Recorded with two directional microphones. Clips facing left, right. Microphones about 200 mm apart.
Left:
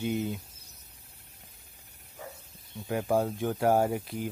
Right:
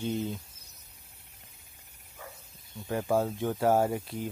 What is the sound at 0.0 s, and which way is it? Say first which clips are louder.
Speech: left 1 dB; 10° left (ahead or behind).